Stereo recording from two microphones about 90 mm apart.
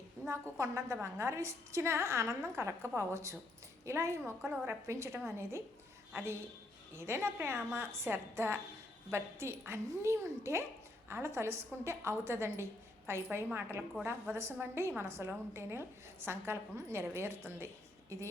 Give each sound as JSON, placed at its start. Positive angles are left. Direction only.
{"t": 0.5, "sound": "a woman's voice", "side_deg": -35}